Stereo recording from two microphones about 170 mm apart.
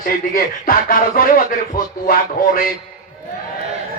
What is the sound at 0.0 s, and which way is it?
A man's voice, 60° left (ahead or behind).